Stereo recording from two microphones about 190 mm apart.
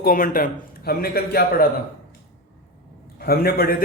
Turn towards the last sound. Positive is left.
turn(degrees=55)  # may be behind; listen again after turning